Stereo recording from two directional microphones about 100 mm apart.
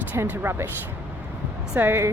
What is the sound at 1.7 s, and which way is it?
Speech, 20° right (ahead or behind).